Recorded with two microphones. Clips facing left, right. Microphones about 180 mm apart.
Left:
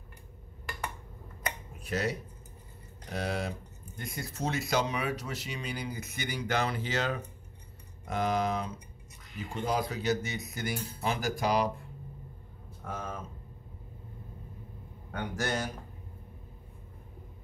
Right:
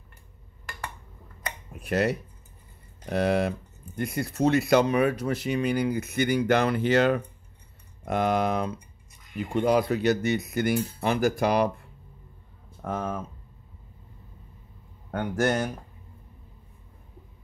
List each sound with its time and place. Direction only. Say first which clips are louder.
1.8 s speech: right 8 dB; 60° right (ahead or behind)
12.8 s speech: right 8 dB; 55° right (ahead or behind)
15.0 s speech: right 8 dB; 55° right (ahead or behind)